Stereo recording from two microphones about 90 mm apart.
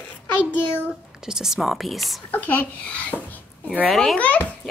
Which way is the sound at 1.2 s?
5° right (ahead or behind).